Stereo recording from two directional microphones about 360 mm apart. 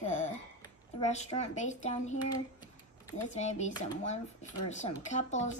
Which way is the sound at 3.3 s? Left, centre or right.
Centre.